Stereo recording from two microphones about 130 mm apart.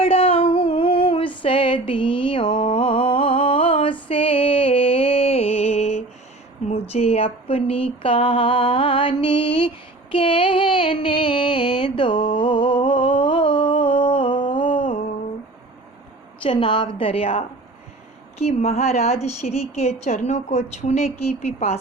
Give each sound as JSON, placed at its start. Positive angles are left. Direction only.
{"t": 0.0, "sound": "female singing", "side_deg": 45}
{"t": 4.1, "sound": "music", "side_deg": 45}
{"t": 6.9, "sound": "a sound", "side_deg": 50}
{"t": 16.4, "sound": "a woman's voice", "side_deg": 40}
{"t": 18.3, "sound": "a woman's voice", "side_deg": 55}